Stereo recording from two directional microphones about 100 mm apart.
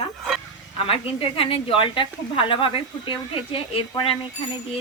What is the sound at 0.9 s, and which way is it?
Speech, 70° left (ahead or behind).